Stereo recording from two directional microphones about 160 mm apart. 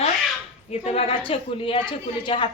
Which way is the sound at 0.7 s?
40° left (ahead or behind).